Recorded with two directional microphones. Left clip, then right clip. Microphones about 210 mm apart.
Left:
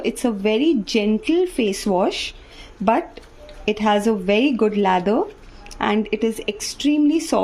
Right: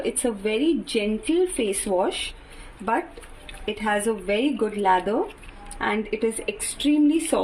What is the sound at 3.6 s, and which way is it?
Speech, 50° left (ahead or behind).